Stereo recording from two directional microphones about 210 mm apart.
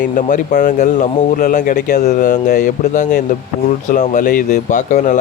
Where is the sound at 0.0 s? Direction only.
35° left (ahead or behind).